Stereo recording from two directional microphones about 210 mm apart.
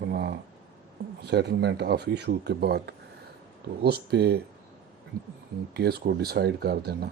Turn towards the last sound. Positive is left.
turn(degrees=-50)  # may be behind; listen again after turning